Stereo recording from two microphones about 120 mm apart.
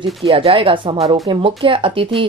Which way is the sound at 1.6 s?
45° right (ahead or behind).